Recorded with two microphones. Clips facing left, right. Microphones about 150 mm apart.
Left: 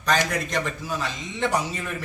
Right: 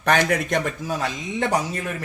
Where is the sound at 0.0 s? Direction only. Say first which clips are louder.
Right 4 dB; 60° right (ahead or behind).